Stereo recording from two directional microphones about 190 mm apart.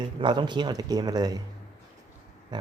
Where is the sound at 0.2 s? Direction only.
25° right (ahead or behind).